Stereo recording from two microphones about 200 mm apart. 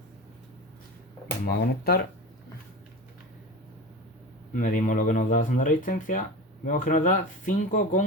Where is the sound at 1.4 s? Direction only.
50° left (ahead or behind).